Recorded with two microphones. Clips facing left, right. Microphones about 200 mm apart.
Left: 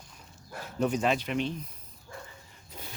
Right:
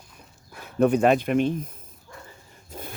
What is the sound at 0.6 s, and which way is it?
Speech, 60° right (ahead or behind).